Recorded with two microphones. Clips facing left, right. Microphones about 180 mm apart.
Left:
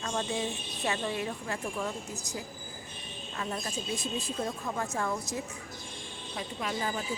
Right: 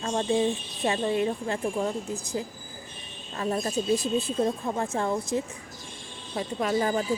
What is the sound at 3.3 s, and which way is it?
Speech, 35° right (ahead or behind).